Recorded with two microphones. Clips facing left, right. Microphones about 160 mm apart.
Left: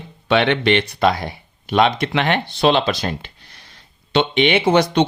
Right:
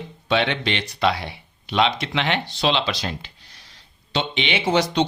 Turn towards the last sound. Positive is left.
turn(degrees=55)  # may be behind; listen again after turning